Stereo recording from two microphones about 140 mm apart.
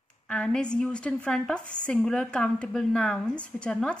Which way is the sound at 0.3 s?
5° left (ahead or behind).